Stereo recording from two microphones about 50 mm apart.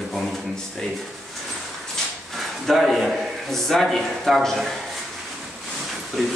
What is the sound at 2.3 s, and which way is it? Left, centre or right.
Speech, centre.